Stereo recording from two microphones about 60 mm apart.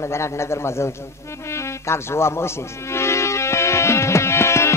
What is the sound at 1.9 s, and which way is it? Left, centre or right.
Speech, left.